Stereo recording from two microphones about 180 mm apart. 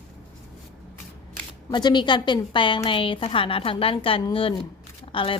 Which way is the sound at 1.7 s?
25° left (ahead or behind).